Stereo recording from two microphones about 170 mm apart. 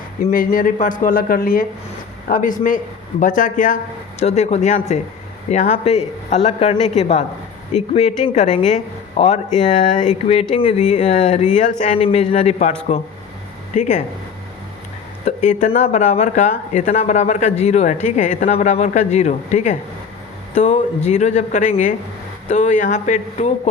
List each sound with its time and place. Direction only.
0.3 s speech: 60° left (ahead or behind)
11.9 s speech: 35° left (ahead or behind)
13.7 s speech: 45° left (ahead or behind)
15.2 s speech: 45° left (ahead or behind)